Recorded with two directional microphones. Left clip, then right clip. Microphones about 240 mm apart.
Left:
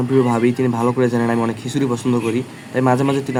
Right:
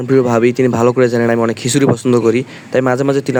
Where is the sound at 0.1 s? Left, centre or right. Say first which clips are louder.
Right 6 dB; right.